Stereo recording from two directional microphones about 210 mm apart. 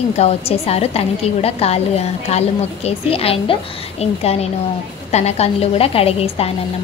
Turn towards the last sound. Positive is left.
turn(degrees=30)  # may be behind; listen again after turning